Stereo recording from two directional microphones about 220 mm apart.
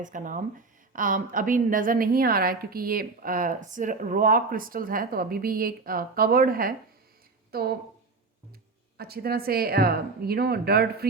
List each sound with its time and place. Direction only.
0.0 s a woman's voice: 35° right (ahead or behind)
9.0 s speech: 45° right (ahead or behind)